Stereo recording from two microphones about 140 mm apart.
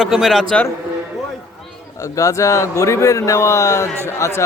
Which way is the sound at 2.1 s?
25° left (ahead or behind).